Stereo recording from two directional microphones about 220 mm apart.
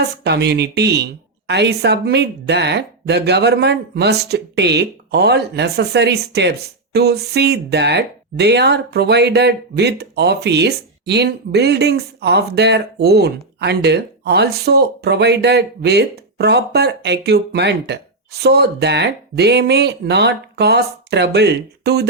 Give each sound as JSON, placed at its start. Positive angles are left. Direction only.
{"t": 0.0, "sound": "speech", "side_deg": -50}